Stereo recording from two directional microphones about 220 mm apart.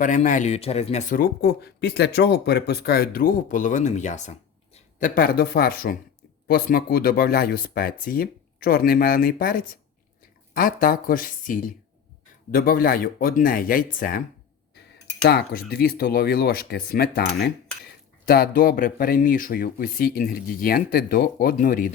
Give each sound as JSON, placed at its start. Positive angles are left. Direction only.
{"t": 0.0, "sound": "speech", "side_deg": 35}
{"t": 15.2, "sound": "speech", "side_deg": 45}